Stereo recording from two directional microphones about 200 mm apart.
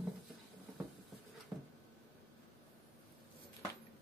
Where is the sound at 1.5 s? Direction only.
5° right (ahead or behind).